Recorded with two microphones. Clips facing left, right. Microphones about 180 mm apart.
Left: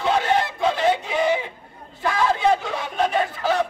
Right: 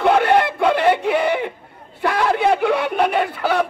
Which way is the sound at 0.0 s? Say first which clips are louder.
Right 6 dB; 60° right (ahead or behind).